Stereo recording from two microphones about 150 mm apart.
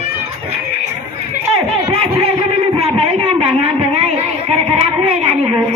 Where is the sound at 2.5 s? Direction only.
40° right (ahead or behind).